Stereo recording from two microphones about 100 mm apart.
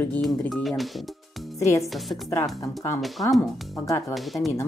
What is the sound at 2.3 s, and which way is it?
Speech, 35° left (ahead or behind).